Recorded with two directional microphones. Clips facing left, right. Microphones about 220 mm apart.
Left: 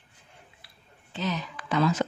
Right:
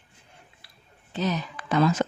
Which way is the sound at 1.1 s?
40° right (ahead or behind).